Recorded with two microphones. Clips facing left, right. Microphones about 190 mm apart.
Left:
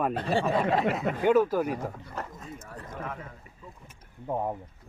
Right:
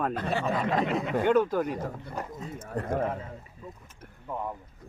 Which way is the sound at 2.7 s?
60° right (ahead or behind).